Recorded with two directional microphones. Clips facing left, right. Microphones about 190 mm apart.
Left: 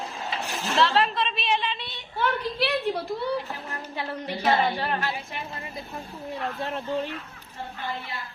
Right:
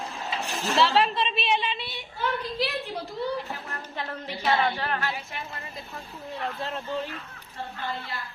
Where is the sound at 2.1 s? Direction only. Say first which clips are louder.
Left 3 dB; 65° left (ahead or behind).